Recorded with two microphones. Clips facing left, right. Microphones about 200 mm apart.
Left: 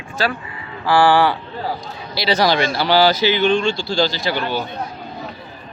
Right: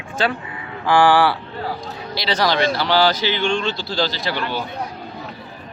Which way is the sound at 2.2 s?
10° left (ahead or behind).